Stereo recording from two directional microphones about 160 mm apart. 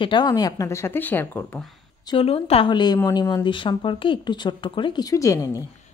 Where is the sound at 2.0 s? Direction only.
35° left (ahead or behind).